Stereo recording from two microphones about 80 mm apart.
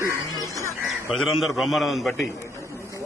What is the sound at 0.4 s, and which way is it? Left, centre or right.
Music, left.